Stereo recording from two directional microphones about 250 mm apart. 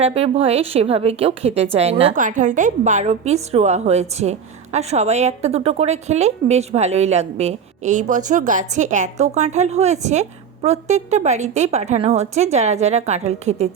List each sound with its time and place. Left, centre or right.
0.0 s a woman's voice: right